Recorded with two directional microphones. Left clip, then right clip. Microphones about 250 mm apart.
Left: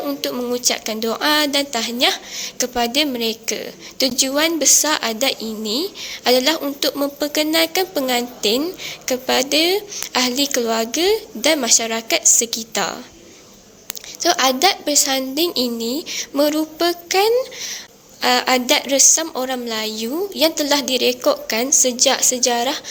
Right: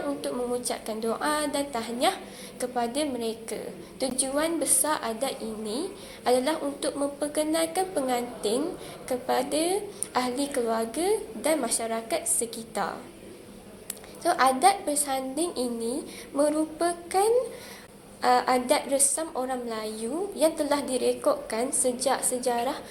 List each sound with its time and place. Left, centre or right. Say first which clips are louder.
0.2 s a woman's voice: left 8 dB; left
14.2 s a woman's voice: left 6 dB; left